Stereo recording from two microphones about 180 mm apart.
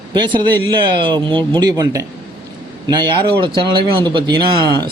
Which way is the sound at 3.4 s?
25° right (ahead or behind).